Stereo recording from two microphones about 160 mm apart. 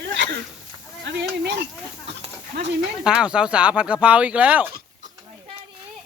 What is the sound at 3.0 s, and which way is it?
Speech, 5° right (ahead or behind).